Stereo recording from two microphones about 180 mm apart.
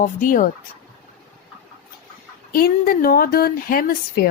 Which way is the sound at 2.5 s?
55° left (ahead or behind).